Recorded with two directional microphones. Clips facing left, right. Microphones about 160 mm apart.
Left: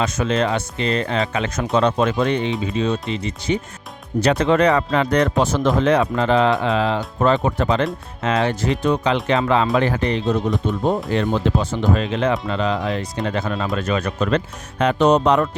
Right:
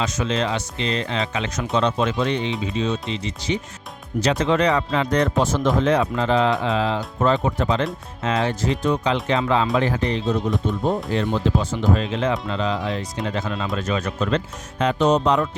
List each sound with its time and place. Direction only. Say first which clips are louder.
0.0 s speech: left 3 dB; 55° left (ahead or behind)